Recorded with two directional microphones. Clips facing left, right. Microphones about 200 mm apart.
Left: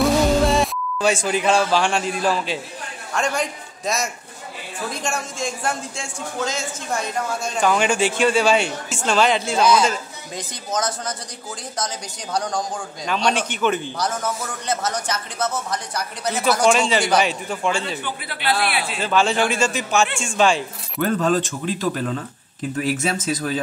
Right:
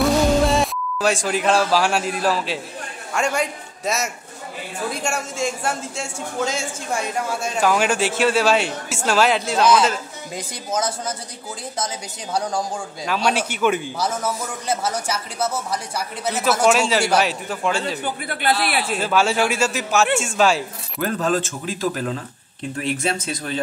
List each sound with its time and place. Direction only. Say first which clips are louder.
0.0 s a man's voice: even; centre (ahead or behind)
17.8 s a man's voice: right 3 dB; 45° right (ahead or behind)
18.9 s a man's voice: even; 5° right (ahead or behind)